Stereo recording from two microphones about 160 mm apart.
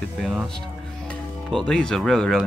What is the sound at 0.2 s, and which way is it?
Speech, 5° right (ahead or behind).